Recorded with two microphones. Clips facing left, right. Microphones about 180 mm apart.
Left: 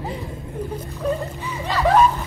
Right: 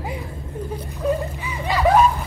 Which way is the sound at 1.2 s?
15° right (ahead or behind).